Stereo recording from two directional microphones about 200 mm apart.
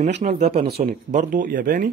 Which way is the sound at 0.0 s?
35° right (ahead or behind).